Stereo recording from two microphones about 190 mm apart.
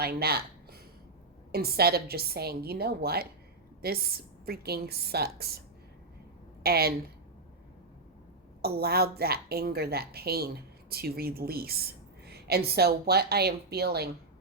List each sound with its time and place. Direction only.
0.0 s a woman's voice: 55° right (ahead or behind)
8.6 s a woman's voice: 55° right (ahead or behind)